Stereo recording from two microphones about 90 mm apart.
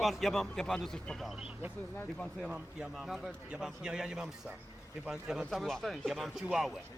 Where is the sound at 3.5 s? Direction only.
5° right (ahead or behind).